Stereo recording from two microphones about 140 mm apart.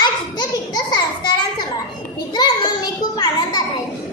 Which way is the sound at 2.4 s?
30° left (ahead or behind).